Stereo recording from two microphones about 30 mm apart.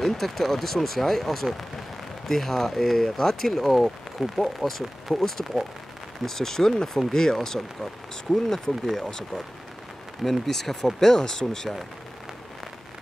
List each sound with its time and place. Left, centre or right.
0.0 s speech: centre
8.8 s speech: centre
10.2 s speech: centre